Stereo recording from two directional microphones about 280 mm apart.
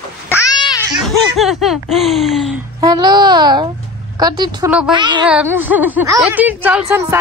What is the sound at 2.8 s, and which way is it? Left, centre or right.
A child's voice, centre.